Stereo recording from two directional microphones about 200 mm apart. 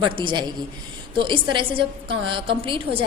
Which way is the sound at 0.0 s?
25° right (ahead or behind).